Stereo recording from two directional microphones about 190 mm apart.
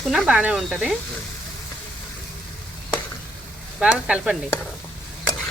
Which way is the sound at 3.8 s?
5° right (ahead or behind).